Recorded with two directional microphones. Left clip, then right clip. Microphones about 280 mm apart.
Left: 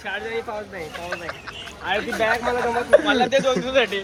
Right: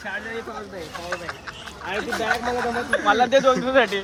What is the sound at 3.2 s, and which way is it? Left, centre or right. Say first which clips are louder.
Speech: right 2 dB; right.